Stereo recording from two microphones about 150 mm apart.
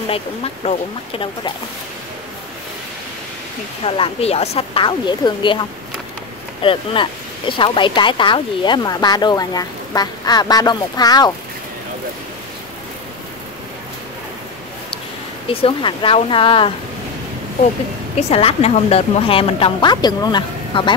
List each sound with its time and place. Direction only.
0.1 s a woman's voice: 40° left (ahead or behind)
3.8 s a woman's voice: 40° left (ahead or behind)
15.4 s a woman's voice: 35° left (ahead or behind)
18.3 s a woman's voice: 40° left (ahead or behind)